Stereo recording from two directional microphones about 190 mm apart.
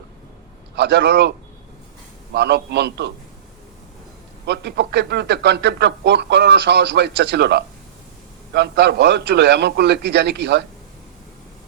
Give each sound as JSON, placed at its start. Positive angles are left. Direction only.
{"t": 0.8, "sound": "a man's voice", "side_deg": -65}
{"t": 2.3, "sound": "a man's voice", "side_deg": -60}
{"t": 4.4, "sound": "a man's voice", "side_deg": -60}